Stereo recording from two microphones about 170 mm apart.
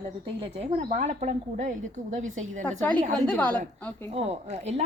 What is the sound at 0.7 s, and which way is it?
A woman's voice, 45° right (ahead or behind).